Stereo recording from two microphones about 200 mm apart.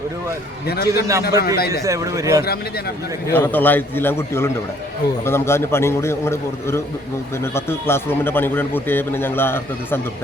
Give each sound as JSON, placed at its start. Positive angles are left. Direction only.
{"t": 0.7, "sound": "a man's voice", "side_deg": 55}
{"t": 1.3, "sound": "speech", "side_deg": -15}
{"t": 3.3, "sound": "a man's voice", "side_deg": 10}